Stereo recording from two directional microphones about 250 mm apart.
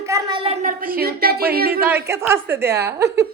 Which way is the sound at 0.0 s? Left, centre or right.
Centre.